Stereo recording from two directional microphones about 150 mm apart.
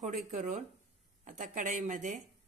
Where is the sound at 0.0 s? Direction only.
60° right (ahead or behind).